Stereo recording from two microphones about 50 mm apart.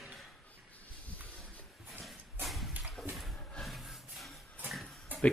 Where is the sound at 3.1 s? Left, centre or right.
Centre.